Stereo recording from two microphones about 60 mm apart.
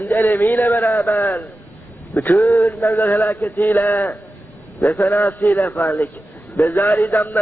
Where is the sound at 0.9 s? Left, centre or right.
Left.